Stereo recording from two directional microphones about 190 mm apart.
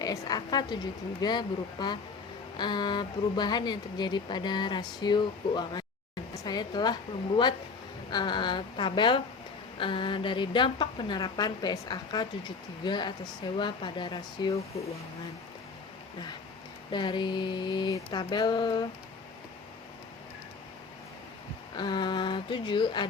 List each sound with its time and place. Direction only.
0.0 s a woman's voice: 20° left (ahead or behind)
16.9 s a woman's voice: 25° left (ahead or behind)
21.8 s a woman's voice: 25° left (ahead or behind)